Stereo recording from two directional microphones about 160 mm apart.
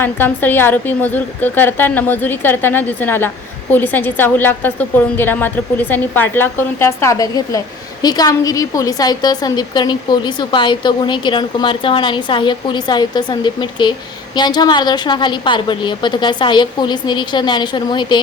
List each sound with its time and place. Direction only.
0.0 s a woman's voice: 15° left (ahead or behind); by 18.2 s 30° left (ahead or behind)